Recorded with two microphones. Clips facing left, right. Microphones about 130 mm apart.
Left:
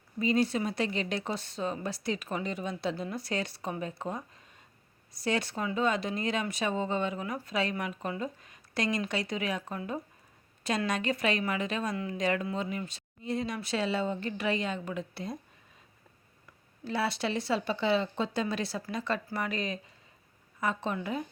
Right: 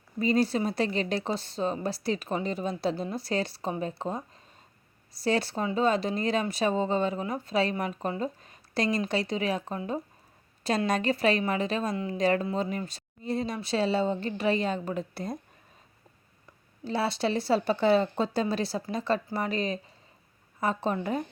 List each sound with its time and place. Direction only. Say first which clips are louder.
0.2 s a woman's voice: right 2 dB; 35° right (ahead or behind)
5.2 s a woman's voice: right 4 dB; 35° right (ahead or behind)
16.8 s a woman's voice: right 3 dB; 30° right (ahead or behind)